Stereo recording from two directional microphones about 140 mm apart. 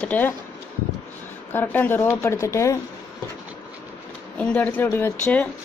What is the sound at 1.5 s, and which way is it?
A woman's voice, 15° left (ahead or behind).